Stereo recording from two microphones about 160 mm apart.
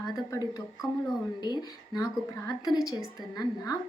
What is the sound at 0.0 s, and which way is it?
A woman's voice, 20° left (ahead or behind).